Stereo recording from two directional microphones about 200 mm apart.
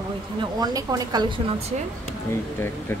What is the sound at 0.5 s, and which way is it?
A woman's voice, 20° right (ahead or behind).